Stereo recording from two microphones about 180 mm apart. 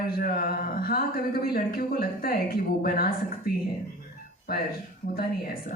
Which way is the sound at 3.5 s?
55° left (ahead or behind).